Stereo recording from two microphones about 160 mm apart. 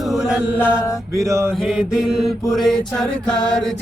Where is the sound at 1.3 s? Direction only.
15° right (ahead or behind).